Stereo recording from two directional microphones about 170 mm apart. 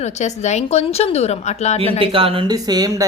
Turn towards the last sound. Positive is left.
turn(degrees=-20)  # may be behind; listen again after turning